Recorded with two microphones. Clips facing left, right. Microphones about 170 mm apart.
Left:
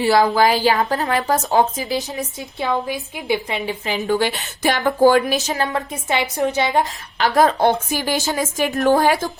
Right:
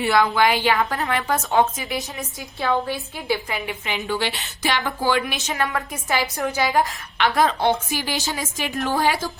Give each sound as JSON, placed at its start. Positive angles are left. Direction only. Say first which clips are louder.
{"t": 0.0, "sound": "a woman's voice", "louder": "left 3 dB", "side_deg": 30}
{"t": 2.6, "sound": "a woman's voice", "louder": "left 1 dB", "side_deg": 15}
{"t": 3.7, "sound": "a woman's voice", "louder": "left 7 dB", "side_deg": 40}
{"t": 5.6, "sound": "a woman's voice", "louder": "left 3 dB", "side_deg": 20}
{"t": 7.2, "sound": "a woman's voice", "louder": "left 4 dB", "side_deg": 45}